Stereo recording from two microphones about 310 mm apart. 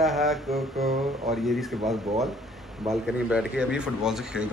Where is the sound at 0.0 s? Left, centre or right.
Centre.